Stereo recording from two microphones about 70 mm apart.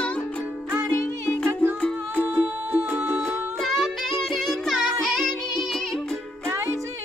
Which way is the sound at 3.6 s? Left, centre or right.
Centre.